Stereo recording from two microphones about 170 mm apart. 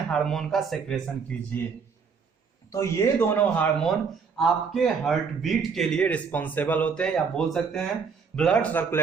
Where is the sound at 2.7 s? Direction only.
15° left (ahead or behind).